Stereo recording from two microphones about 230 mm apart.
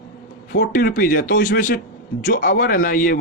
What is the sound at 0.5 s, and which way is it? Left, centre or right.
Speech, left.